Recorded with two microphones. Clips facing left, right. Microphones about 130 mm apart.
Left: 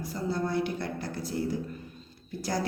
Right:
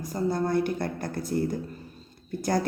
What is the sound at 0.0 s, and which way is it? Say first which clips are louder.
A woman's voice: right 4 dB; 45° right (ahead or behind).